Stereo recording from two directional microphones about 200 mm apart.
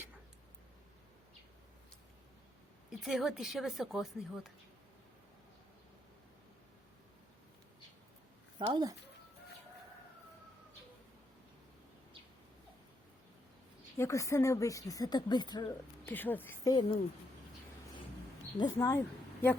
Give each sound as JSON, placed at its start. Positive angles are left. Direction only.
{"t": 2.9, "sound": "a woman's voice", "side_deg": 0}
{"t": 8.5, "sound": "speech", "side_deg": -25}
{"t": 14.0, "sound": "speech", "side_deg": 15}
{"t": 16.0, "sound": "speech", "side_deg": 10}
{"t": 18.5, "sound": "speech", "side_deg": 20}